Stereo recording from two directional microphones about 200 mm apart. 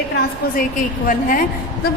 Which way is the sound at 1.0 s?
40° left (ahead or behind).